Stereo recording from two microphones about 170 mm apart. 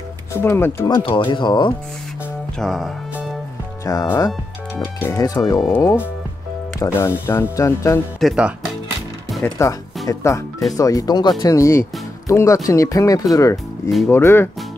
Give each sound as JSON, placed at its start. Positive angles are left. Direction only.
{"t": 0.3, "sound": "speech", "side_deg": 15}
{"t": 0.9, "sound": "speech", "side_deg": 30}
{"t": 2.6, "sound": "speech", "side_deg": 0}
{"t": 3.9, "sound": "speech", "side_deg": 20}
{"t": 5.0, "sound": "speech", "side_deg": 20}
{"t": 8.2, "sound": "speech", "side_deg": -5}
{"t": 9.4, "sound": "speech", "side_deg": 20}
{"t": 13.8, "sound": "speech", "side_deg": 0}
{"t": 14.1, "sound": "speech", "side_deg": 15}